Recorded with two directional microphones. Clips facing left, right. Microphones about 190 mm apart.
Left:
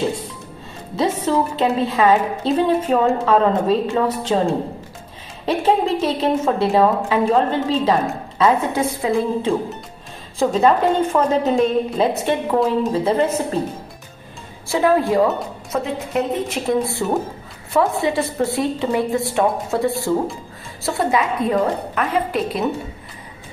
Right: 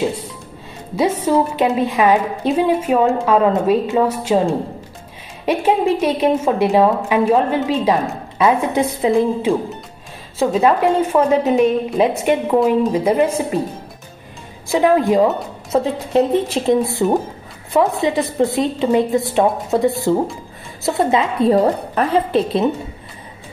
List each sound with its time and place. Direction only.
0.9 s a woman's voice: 10° right (ahead or behind)
5.4 s a woman's voice: 10° right (ahead or behind)
10.5 s a woman's voice: 10° right (ahead or behind)
14.7 s a woman's voice: 20° right (ahead or behind)
16.8 s a woman's voice: 20° right (ahead or behind)